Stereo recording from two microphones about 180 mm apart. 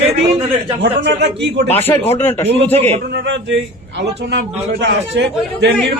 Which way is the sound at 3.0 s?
80° right.